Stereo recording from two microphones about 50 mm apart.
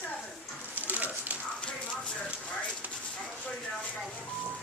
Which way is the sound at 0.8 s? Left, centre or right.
Right.